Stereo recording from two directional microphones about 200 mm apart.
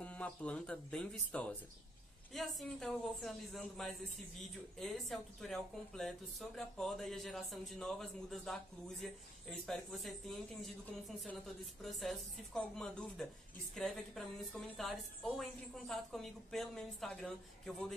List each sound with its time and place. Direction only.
0.0 s speech: 5° left (ahead or behind)